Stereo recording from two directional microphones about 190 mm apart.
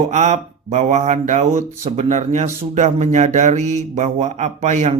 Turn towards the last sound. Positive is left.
turn(degrees=-35)  # may be behind; listen again after turning